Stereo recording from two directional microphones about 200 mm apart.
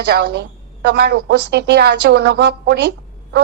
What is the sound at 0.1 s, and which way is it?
A woman's voice, 55° right (ahead or behind).